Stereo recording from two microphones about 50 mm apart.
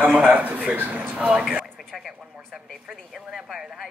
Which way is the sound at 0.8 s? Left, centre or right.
Right.